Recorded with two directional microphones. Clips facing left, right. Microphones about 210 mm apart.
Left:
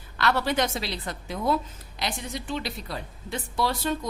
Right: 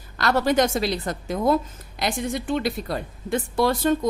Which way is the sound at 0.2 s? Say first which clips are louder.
Right 5 dB; 45° right (ahead or behind).